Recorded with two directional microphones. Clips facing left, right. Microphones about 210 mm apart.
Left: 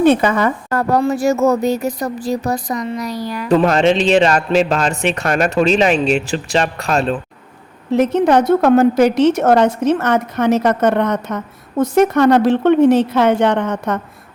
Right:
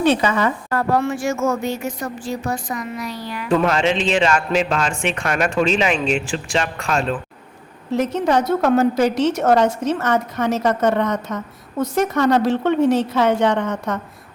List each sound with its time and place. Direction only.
0.0 s a woman's voice: 50° left (ahead or behind); by 7.2 s 35° left (ahead or behind)
7.9 s a woman's voice: 55° left (ahead or behind)